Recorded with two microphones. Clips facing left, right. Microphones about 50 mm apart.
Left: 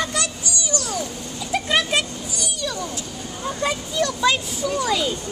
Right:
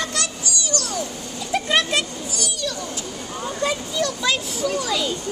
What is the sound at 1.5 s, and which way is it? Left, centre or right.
Vehicle, centre.